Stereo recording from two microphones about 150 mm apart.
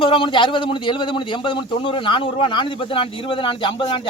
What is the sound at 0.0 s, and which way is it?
Speech, 35° left (ahead or behind).